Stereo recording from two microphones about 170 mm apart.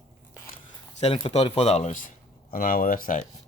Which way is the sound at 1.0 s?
35° left (ahead or behind).